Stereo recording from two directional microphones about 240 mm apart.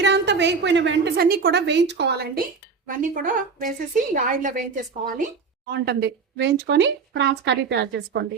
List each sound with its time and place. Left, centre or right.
0.0 s a woman's voice: right